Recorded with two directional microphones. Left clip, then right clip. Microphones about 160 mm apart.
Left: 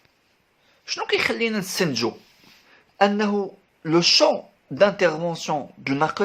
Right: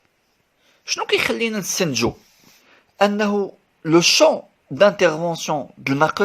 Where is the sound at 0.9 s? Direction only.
35° right (ahead or behind).